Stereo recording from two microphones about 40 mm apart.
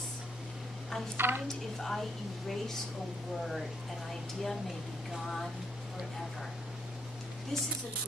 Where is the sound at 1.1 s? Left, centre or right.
Right.